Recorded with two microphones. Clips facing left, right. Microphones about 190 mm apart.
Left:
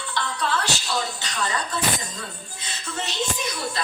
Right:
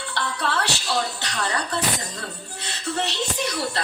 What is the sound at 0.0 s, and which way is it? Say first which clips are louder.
Music: even; 65° right (ahead or behind).